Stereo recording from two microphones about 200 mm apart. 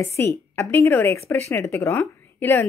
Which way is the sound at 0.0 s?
15° left (ahead or behind).